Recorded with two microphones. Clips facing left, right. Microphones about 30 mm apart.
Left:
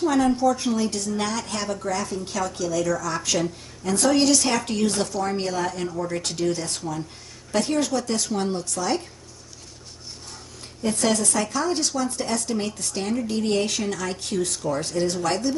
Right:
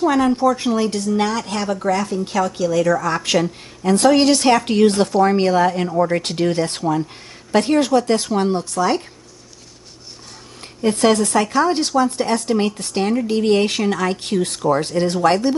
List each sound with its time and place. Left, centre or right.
0.0 s a woman's voice: right
10.8 s a woman's voice: right